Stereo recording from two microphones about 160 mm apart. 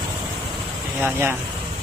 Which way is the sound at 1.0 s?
15° right (ahead or behind).